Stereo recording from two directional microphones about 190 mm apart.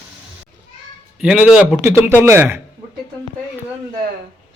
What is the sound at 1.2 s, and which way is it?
A man's voice, 5° right (ahead or behind).